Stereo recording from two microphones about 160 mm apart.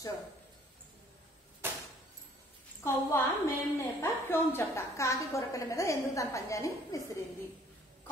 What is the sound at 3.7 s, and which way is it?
A woman's voice, 15° left (ahead or behind).